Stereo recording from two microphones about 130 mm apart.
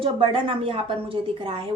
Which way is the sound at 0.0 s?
45° right (ahead or behind).